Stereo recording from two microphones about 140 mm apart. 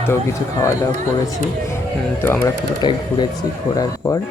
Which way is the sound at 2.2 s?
15° left (ahead or behind).